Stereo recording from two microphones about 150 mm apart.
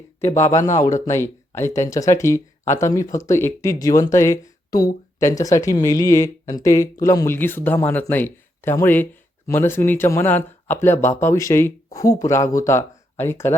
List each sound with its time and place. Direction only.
0.2 s speech: 15° left (ahead or behind)
0.5 s a man's voice: 55° left (ahead or behind)
1.0 s speech: 15° left (ahead or behind)